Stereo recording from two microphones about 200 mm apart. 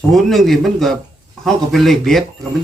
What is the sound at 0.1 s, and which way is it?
Speech, centre (ahead or behind).